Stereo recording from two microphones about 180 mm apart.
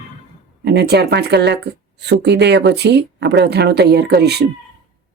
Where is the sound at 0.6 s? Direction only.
65° right (ahead or behind).